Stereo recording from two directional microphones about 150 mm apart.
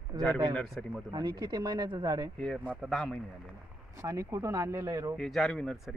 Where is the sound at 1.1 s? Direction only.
30° right (ahead or behind).